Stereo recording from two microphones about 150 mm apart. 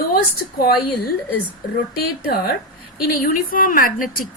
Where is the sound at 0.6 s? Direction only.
90° left.